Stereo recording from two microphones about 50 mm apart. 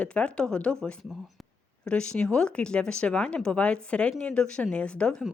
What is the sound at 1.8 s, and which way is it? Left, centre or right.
A woman's voice, centre.